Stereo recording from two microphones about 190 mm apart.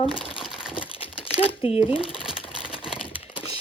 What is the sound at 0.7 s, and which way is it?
Typing, 25° left (ahead or behind).